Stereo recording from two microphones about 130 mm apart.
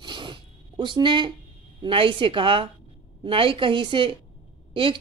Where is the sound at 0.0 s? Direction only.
40° right (ahead or behind).